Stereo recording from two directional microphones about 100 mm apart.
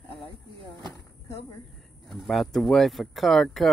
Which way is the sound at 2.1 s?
Centre (ahead or behind).